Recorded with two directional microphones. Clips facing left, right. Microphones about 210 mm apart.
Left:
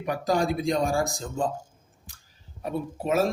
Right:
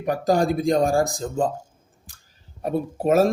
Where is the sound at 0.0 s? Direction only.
45° right (ahead or behind).